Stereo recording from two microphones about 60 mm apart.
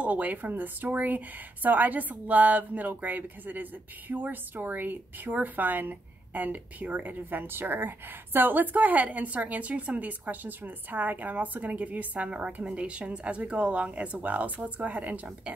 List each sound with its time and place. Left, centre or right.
0.0 s a woman's voice: right